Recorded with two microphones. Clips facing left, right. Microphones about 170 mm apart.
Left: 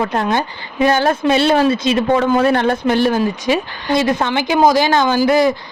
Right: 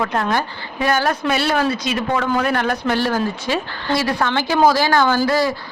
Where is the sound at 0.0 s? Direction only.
20° left (ahead or behind).